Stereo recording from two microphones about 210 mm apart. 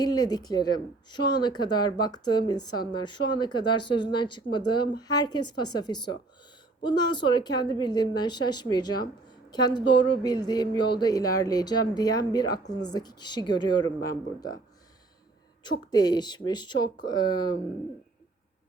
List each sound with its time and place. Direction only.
0.0 s speech: 20° left (ahead or behind)
15.6 s speech: 20° left (ahead or behind)